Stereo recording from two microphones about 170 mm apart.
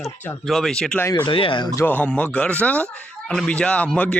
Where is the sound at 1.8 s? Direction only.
10° left (ahead or behind).